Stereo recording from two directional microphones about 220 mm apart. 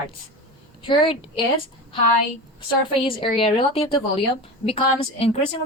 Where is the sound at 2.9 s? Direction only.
25° left (ahead or behind).